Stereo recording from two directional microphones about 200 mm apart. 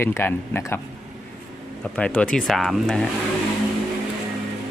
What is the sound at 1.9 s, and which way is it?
Speech, 5° left (ahead or behind).